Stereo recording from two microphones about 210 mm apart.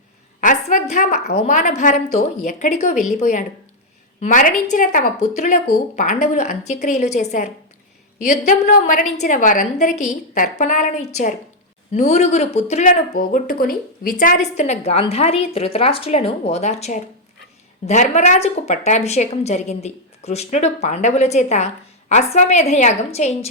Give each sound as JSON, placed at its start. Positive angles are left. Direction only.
{"t": 0.4, "sound": "speech", "side_deg": 35}